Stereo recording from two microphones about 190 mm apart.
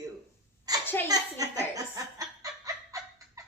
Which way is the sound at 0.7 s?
20° right (ahead or behind).